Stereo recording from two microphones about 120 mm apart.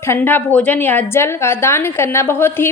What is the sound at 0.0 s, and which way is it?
A woman's voice, 20° left (ahead or behind).